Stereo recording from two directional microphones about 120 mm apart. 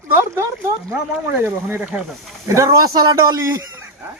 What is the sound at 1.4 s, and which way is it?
Speech, 15° right (ahead or behind).